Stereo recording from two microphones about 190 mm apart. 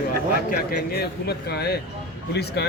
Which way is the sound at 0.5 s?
55° left (ahead or behind).